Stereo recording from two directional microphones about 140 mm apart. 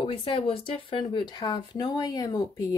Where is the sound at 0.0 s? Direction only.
40° left (ahead or behind).